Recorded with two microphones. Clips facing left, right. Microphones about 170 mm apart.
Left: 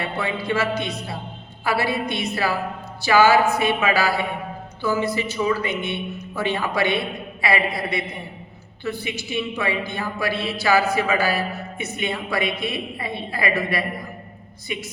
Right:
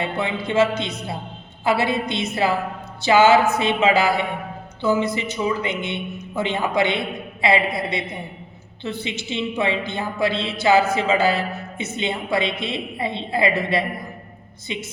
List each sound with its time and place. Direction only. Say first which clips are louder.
0.0 s a woman's voice: right 2 dB; 20° right (ahead or behind)